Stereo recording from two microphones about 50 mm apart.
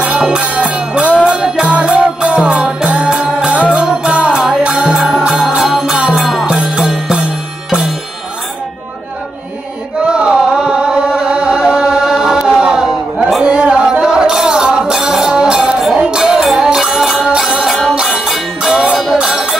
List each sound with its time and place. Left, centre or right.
0.0 s music: right
3.8 s music: centre
4.1 s music: right
4.5 s music: centre
10.0 s music: right
12.4 s chant: centre
13.4 s music: right